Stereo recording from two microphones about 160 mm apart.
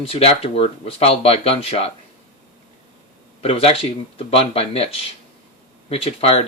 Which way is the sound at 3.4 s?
40° left (ahead or behind).